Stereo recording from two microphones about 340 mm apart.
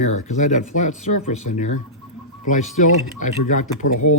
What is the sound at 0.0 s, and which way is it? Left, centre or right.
Speech, centre.